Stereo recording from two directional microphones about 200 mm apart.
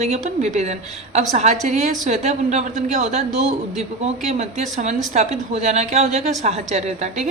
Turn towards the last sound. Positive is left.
turn(degrees=-35)  # may be behind; listen again after turning